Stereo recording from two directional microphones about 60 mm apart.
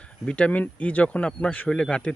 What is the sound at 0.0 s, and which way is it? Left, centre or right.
Speech, centre.